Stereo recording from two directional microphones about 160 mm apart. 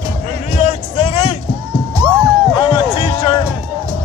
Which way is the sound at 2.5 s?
35° left (ahead or behind).